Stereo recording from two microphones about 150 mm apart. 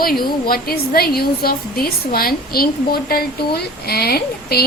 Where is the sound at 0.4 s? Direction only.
90° left.